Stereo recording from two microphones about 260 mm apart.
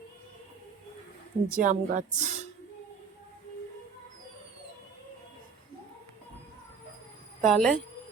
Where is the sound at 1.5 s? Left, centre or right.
Right.